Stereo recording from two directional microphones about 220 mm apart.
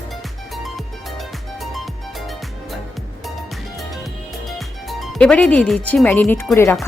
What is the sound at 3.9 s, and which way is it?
Music, centre (ahead or behind).